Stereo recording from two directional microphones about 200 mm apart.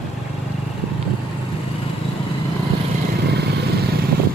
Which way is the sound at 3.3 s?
55° right (ahead or behind).